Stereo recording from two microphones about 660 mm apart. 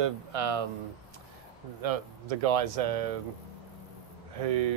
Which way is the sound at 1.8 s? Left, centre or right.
Right.